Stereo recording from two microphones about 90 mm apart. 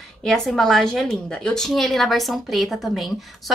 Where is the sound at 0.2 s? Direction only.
5° left (ahead or behind).